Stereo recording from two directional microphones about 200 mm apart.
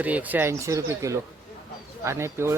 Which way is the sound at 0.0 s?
10° right (ahead or behind).